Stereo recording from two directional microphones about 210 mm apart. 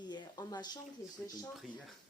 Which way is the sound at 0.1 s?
20° left (ahead or behind).